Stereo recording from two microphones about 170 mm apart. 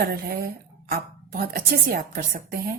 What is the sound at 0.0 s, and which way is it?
Speech, 65° right (ahead or behind).